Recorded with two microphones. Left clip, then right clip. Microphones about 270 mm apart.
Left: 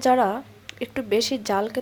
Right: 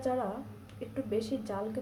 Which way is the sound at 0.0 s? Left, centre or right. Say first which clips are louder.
Left 14 dB; left.